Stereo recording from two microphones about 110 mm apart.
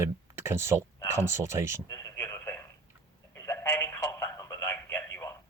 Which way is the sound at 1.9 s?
30° left (ahead or behind).